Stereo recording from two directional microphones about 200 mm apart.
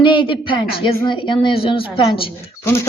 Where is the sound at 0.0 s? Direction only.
25° left (ahead or behind).